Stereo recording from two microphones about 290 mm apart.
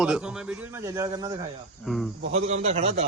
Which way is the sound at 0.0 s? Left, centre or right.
Centre.